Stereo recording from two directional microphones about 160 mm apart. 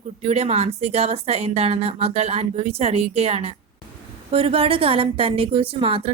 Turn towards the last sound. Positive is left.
turn(degrees=-35)  # may be behind; listen again after turning